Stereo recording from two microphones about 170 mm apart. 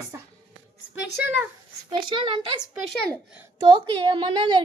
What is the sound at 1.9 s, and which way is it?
Speech, 30° right (ahead or behind).